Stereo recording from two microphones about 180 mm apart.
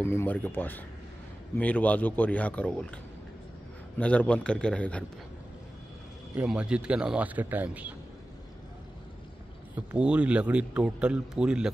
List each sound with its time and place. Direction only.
0.0 s a man's voice: 15° left (ahead or behind)
4.0 s a man's voice: 5° left (ahead or behind)
6.3 s speech: 5° right (ahead or behind)
9.8 s a man's voice: 5° right (ahead or behind)